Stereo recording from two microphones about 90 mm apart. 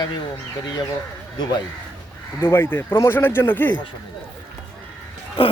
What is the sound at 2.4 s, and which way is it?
Speech, 25° left (ahead or behind).